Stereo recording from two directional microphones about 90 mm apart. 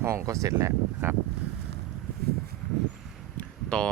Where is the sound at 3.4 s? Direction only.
10° left (ahead or behind).